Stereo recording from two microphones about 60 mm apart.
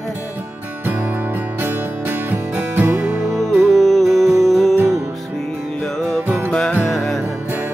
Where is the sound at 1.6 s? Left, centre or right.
Right.